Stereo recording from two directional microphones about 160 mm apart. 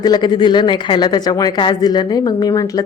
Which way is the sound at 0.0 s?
25° left (ahead or behind).